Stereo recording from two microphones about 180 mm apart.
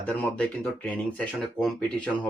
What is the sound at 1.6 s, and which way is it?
Speech, 5° left (ahead or behind).